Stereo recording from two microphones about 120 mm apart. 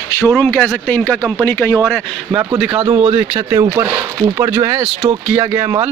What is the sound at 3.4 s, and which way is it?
Speech, 30° right (ahead or behind).